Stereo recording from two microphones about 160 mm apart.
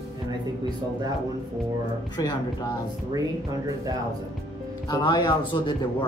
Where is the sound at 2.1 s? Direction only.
25° left (ahead or behind).